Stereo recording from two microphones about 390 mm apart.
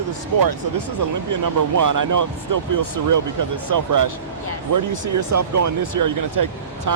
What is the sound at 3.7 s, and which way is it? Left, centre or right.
Speech, right.